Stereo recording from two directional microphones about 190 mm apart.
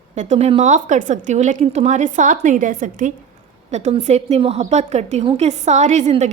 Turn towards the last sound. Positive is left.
turn(degrees=-40)  # may be behind; listen again after turning